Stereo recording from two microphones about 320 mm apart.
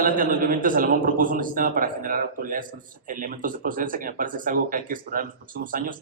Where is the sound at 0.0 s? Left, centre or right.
Right.